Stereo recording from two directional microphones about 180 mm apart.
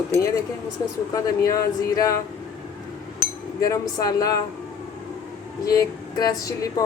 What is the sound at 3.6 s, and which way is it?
Speech, 20° left (ahead or behind).